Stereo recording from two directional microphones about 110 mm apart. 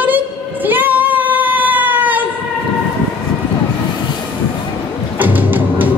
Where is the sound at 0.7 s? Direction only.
15° right (ahead or behind).